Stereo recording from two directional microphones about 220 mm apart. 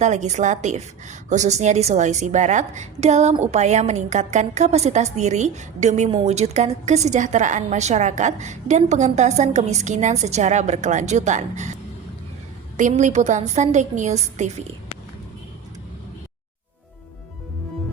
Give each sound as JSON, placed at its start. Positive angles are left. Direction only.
{"t": 0.0, "sound": "a woman's voice", "side_deg": -30}